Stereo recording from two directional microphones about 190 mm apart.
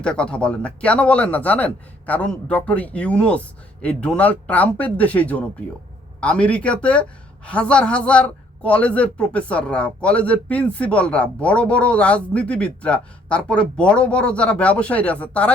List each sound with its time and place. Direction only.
0.0 s a man's voice: 5° left (ahead or behind)